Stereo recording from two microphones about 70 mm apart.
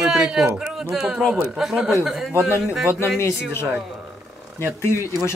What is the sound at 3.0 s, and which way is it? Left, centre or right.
Speech, left.